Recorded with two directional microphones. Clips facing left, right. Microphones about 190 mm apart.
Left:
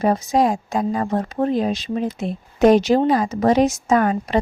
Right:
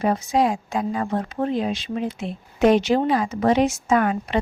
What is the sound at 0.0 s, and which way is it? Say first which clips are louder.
Speech: left 3 dB; 40° left (ahead or behind).